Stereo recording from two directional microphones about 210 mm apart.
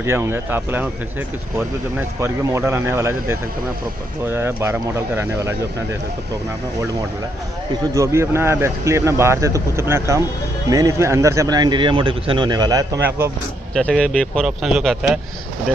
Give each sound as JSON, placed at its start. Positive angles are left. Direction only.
{"t": 0.0, "sound": "a man's voice", "side_deg": -10}
{"t": 2.0, "sound": "a man's voice", "side_deg": -10}
{"t": 7.9, "sound": "a man's voice", "side_deg": -15}
{"t": 13.7, "sound": "speech", "side_deg": 5}